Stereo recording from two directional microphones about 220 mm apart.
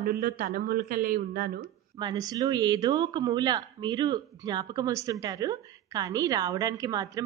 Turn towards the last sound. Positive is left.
turn(degrees=-15)  # may be behind; listen again after turning